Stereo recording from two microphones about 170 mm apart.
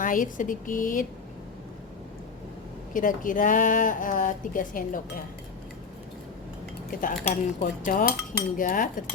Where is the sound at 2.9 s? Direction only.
50° left (ahead or behind).